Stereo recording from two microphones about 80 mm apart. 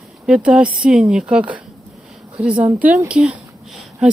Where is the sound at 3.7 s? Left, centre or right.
Centre.